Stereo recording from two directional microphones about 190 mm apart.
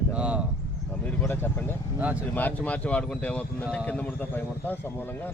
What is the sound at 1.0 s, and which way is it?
Speech, 10° left (ahead or behind).